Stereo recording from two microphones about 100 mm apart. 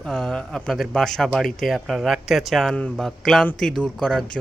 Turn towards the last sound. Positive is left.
turn(degrees=5)  # may be behind; listen again after turning